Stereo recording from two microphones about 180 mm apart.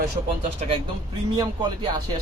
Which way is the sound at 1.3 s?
25° right (ahead or behind).